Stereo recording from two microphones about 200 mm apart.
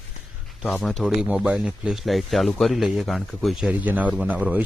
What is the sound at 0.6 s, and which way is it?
Speech, centre (ahead or behind).